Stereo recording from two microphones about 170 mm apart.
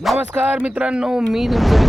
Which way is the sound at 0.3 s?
10° right (ahead or behind).